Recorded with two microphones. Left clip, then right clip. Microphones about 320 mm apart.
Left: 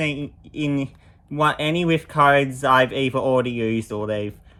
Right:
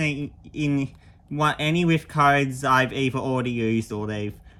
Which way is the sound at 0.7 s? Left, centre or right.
Centre.